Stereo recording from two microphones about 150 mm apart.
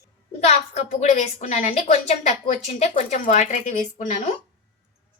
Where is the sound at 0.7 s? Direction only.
45° left (ahead or behind).